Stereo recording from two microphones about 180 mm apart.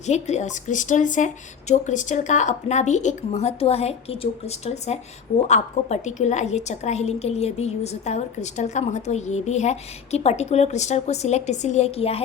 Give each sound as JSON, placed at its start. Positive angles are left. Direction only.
{"t": 0.0, "sound": "a woman's voice", "side_deg": 40}